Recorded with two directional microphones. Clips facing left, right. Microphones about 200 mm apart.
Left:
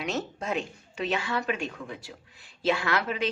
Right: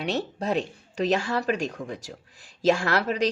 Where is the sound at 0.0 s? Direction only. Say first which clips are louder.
Right 4 dB; 35° right (ahead or behind).